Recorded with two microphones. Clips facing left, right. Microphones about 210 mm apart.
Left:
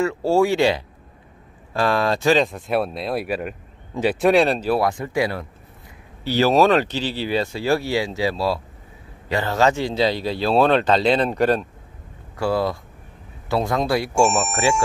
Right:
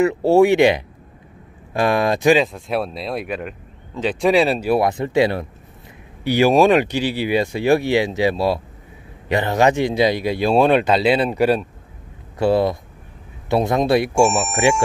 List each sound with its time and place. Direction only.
0.0 s speech: 20° right (ahead or behind)
2.4 s speech: centre (ahead or behind); by 5.5 s 25° right (ahead or behind)
6.2 s speech: 15° right (ahead or behind)
12.4 s speech: 20° right (ahead or behind)
14.2 s speech: centre (ahead or behind)
14.5 s speech: 15° right (ahead or behind)